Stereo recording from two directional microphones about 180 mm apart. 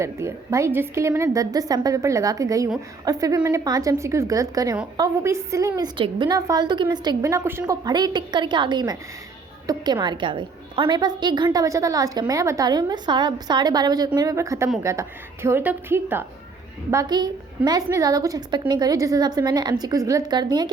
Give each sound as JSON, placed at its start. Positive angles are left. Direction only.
{"t": 0.0, "sound": "a woman's voice", "side_deg": -15}